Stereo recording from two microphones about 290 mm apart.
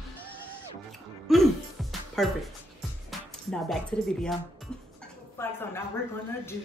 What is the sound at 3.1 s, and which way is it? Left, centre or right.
Speech, centre.